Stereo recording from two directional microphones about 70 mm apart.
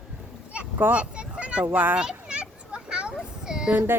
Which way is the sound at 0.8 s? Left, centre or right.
Centre.